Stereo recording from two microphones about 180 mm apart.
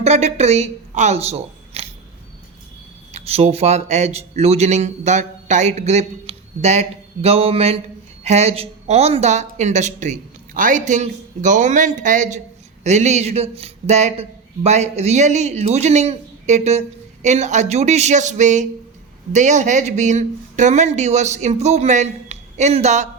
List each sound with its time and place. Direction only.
0.0 s speech: 35° right (ahead or behind)
3.1 s a man's voice: 35° right (ahead or behind)